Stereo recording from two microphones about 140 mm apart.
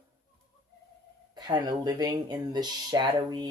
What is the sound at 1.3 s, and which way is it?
Speech, 30° right (ahead or behind).